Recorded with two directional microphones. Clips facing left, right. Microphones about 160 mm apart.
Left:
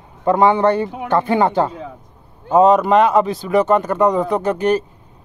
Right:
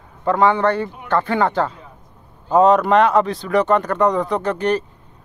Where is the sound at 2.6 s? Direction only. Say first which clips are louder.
Left 1 dB; 5° left (ahead or behind).